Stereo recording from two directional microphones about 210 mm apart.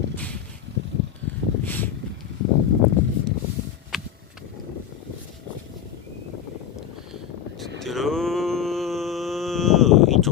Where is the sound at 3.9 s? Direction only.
Centre (ahead or behind).